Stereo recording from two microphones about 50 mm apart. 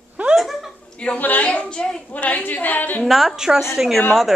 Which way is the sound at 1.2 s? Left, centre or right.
Left.